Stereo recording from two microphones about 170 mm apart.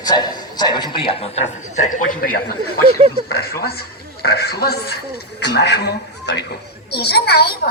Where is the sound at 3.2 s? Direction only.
65° left (ahead or behind).